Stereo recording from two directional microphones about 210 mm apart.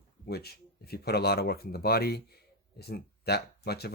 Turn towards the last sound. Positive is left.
turn(degrees=50)  # may be behind; listen again after turning